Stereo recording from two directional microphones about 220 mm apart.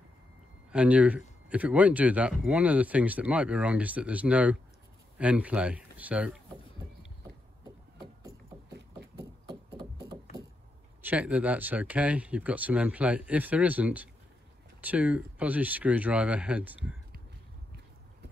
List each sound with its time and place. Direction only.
0.7 s speech: 5° right (ahead or behind)
9.5 s a sound: 20° right (ahead or behind)
11.0 s speech: 5° right (ahead or behind)